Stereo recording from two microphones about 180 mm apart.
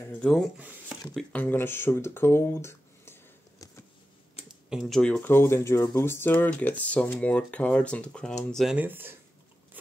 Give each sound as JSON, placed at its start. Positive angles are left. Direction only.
{"t": 0.2, "sound": "speech", "side_deg": 0}
{"t": 0.6, "sound": "speech", "side_deg": -10}
{"t": 1.0, "sound": "speech", "side_deg": 10}
{"t": 4.6, "sound": "speech", "side_deg": 0}